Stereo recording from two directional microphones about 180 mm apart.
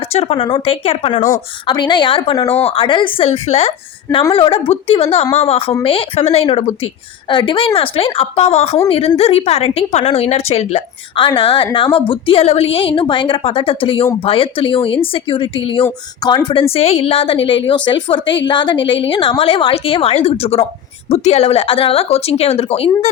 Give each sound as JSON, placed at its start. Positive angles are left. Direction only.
{"t": 0.1, "sound": "a woman's voice", "side_deg": 35}